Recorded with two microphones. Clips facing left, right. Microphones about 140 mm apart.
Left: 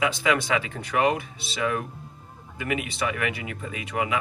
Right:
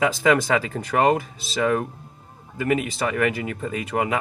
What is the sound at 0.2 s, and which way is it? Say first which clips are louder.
Speech: right 5 dB; 40° right (ahead or behind).